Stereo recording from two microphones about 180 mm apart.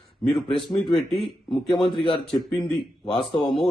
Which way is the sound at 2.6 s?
25° left (ahead or behind).